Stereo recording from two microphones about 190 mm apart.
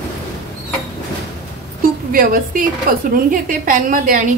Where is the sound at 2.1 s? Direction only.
50° right (ahead or behind).